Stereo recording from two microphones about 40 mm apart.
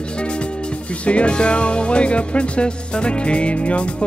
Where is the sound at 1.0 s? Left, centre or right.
Left.